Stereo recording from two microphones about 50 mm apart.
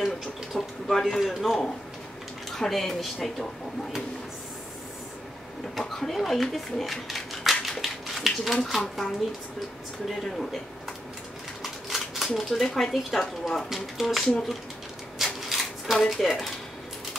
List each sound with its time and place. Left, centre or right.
0.0 s a sound: centre
1.2 s speech: centre
5.8 s speech: centre
10.0 s speech: centre
11.6 s scissors: centre
12.4 s speech: centre
15.1 s shuffling cards: centre
16.0 s speech: centre